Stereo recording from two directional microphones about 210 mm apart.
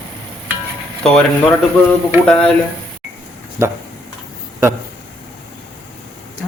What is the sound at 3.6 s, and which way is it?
Speech, 15° right (ahead or behind).